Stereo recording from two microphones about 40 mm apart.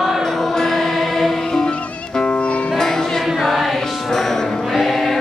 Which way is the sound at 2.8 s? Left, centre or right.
Centre.